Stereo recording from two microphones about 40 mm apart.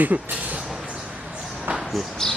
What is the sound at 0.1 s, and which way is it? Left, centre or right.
Speech, right.